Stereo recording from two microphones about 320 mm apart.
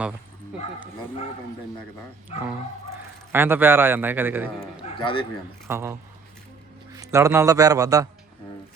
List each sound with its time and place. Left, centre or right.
2.3 s speech: centre
2.9 s a man's voice: centre
4.8 s a sound: centre
5.6 s a man's voice: centre